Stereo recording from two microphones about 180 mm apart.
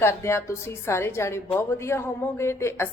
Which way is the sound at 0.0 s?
15° left (ahead or behind).